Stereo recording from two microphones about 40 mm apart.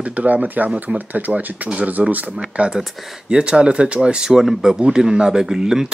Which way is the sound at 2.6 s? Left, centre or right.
Right.